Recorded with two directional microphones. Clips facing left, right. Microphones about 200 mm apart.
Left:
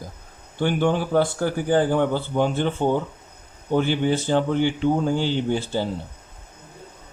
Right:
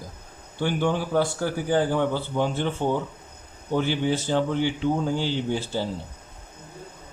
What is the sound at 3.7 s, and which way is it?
Speech, 55° left (ahead or behind).